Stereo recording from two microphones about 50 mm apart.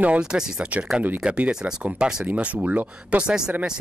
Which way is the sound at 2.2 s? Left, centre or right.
Right.